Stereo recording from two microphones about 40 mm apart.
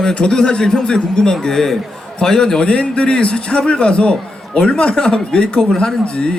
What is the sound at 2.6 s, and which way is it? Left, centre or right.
A man's voice, left.